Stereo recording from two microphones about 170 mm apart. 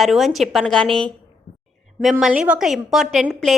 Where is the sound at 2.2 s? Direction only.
5° right (ahead or behind).